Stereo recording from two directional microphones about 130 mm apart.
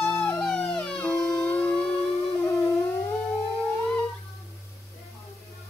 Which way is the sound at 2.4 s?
20° left (ahead or behind).